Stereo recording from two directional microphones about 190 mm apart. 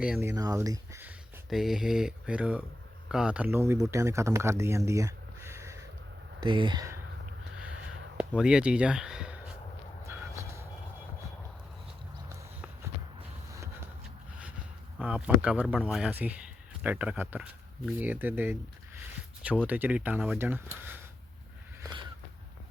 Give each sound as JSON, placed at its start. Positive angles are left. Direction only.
{"t": 0.0, "sound": "speech", "side_deg": -10}
{"t": 1.5, "sound": "speech", "side_deg": 0}
{"t": 6.4, "sound": "speech", "side_deg": -25}
{"t": 8.2, "sound": "speech", "side_deg": -5}
{"t": 10.1, "sound": "train", "side_deg": -15}
{"t": 14.9, "sound": "speech", "side_deg": -10}
{"t": 19.6, "sound": "speech", "side_deg": -10}
{"t": 21.8, "sound": "a sound", "side_deg": -25}